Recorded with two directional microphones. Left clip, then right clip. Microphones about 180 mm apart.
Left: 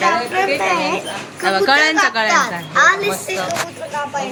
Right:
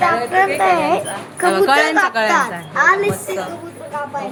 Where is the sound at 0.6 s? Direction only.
65° right (ahead or behind).